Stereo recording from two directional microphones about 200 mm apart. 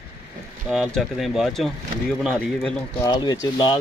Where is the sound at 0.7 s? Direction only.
Centre (ahead or behind).